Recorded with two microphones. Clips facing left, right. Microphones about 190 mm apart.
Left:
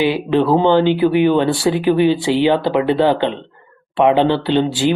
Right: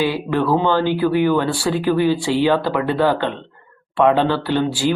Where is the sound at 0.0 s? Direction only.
20° left (ahead or behind).